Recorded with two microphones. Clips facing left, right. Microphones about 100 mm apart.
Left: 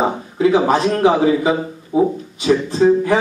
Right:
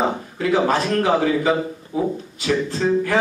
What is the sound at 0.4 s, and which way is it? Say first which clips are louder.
A man's voice: left 5 dB; 20° left (ahead or behind).